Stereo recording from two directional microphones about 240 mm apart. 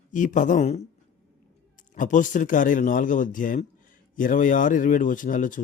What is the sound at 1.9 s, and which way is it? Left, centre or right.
Speech, left.